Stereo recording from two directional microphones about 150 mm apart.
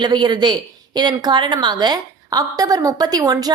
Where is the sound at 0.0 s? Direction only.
30° right (ahead or behind).